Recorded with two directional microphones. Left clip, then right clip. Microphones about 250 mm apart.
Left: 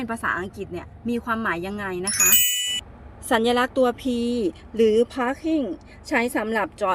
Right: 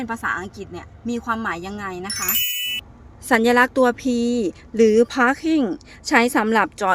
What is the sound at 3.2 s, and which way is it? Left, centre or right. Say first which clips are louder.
Speech: right 5 dB; right.